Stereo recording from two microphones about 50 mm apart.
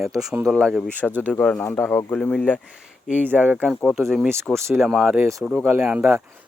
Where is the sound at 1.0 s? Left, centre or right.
Centre.